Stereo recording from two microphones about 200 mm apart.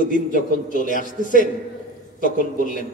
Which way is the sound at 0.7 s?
40° left (ahead or behind).